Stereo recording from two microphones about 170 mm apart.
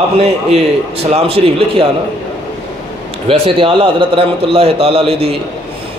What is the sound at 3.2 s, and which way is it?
A man's voice, 30° right (ahead or behind).